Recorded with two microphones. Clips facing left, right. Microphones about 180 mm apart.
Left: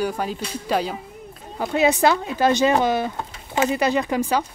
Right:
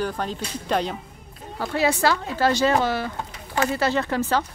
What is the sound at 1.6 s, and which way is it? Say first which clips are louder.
Speech: left 3 dB; 20° left (ahead or behind).